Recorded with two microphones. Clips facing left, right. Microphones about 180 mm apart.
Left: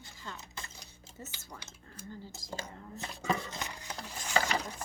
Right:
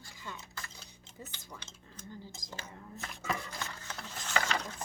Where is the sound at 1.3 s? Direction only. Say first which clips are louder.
Even; 10° left (ahead or behind).